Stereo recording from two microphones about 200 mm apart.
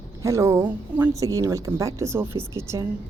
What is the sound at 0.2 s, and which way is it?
A woman's voice, 15° right (ahead or behind).